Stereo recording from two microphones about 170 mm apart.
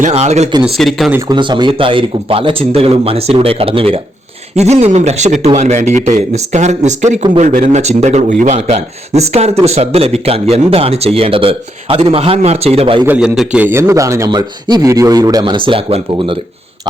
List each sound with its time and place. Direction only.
0.0 s speech: 40° right (ahead or behind)
0.6 s speech: centre (ahead or behind)
1.3 s speech: 25° right (ahead or behind)
13.1 s a man's voice: 5° right (ahead or behind); by 16.4 s 30° right (ahead or behind)